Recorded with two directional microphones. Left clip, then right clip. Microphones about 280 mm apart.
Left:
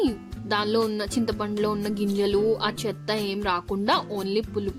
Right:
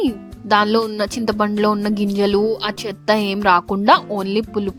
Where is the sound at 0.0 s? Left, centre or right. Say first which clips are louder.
Right 4 dB; right.